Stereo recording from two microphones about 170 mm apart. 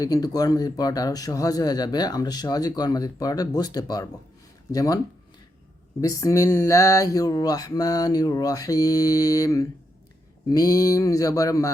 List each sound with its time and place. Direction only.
0.0 s speech: 20° left (ahead or behind)
6.0 s speech: 20° left (ahead or behind)